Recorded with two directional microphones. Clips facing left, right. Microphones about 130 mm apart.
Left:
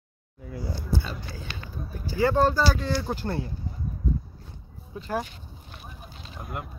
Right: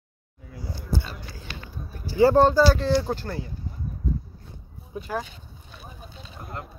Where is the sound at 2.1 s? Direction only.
30° right (ahead or behind).